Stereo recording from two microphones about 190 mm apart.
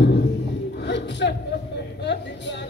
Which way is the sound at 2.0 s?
65° left (ahead or behind).